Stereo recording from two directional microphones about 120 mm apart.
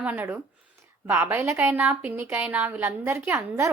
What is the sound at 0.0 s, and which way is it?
A woman's voice, 15° right (ahead or behind).